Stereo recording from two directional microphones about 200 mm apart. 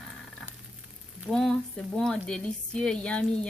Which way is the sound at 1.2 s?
Centre (ahead or behind).